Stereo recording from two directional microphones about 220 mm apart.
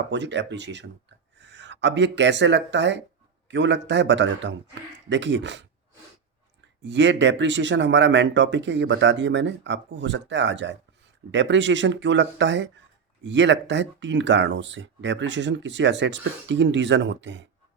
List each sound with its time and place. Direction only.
0.1 s a man's voice: 55° right (ahead or behind)
6.8 s speech: 55° right (ahead or behind)